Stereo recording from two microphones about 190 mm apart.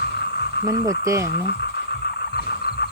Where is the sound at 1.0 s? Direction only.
15° right (ahead or behind).